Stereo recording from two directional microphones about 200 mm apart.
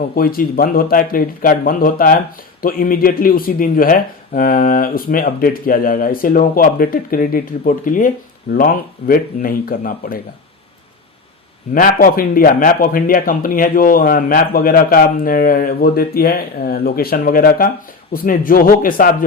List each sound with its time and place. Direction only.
0.2 s speech: 45° left (ahead or behind)
11.7 s speech: 45° left (ahead or behind)